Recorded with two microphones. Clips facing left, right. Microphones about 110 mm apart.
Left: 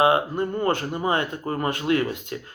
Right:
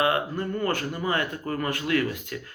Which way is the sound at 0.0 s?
20° left (ahead or behind).